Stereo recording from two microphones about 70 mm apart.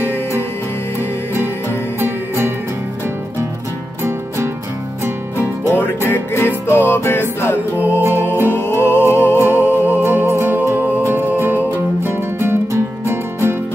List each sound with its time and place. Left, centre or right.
2.0 s music: right
6.0 s music: left
7.8 s music: right
8.5 s music: left
10.0 s music: right